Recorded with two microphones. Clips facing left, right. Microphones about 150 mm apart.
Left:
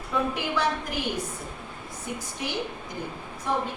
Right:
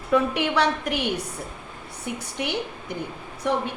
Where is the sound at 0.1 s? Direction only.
75° right (ahead or behind).